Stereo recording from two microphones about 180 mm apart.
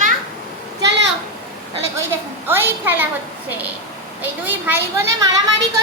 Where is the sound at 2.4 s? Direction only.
10° right (ahead or behind).